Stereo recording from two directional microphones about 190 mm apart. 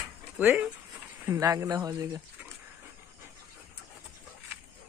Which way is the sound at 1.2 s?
20° right (ahead or behind).